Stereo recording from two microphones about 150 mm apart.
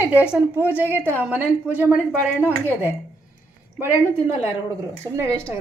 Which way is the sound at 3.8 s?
15° right (ahead or behind).